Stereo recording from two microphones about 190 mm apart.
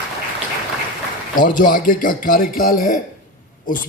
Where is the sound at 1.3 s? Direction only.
45° left (ahead or behind).